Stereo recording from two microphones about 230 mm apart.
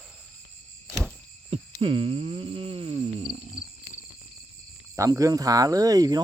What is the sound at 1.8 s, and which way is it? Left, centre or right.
Speech, right.